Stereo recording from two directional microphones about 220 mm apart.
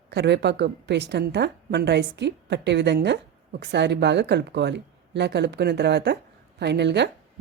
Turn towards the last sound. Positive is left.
turn(degrees=-50)  # may be behind; listen again after turning